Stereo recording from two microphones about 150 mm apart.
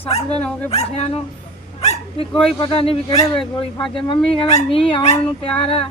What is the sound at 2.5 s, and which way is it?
Speech, 35° left (ahead or behind).